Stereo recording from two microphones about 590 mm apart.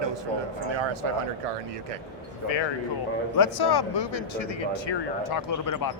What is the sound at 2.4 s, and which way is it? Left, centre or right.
Speech, left.